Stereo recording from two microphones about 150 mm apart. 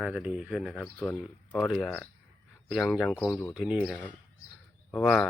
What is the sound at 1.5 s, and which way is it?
Speech, 5° left (ahead or behind).